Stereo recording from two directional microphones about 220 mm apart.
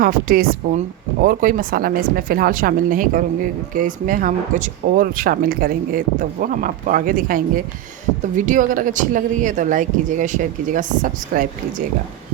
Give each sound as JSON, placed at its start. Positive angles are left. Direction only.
{"t": 0.0, "sound": "speech", "side_deg": -40}